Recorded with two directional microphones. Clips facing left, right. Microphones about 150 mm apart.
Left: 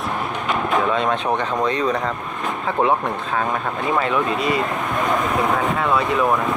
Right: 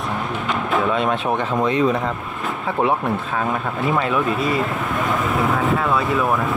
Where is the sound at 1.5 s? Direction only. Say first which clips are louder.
Right 2 dB; 50° right (ahead or behind).